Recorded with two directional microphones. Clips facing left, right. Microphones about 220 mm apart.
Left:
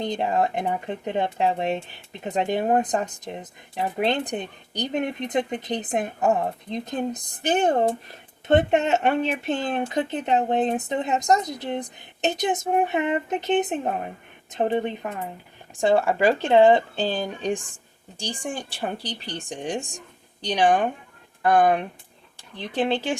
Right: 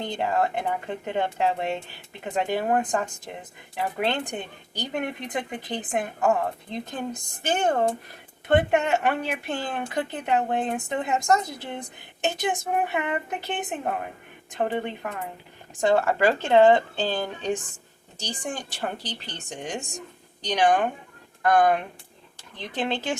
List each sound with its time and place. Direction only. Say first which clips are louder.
0.0 s speech: left 2 dB; 20° left (ahead or behind)